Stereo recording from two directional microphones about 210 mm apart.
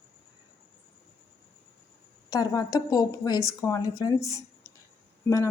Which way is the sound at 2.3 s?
15° left (ahead or behind).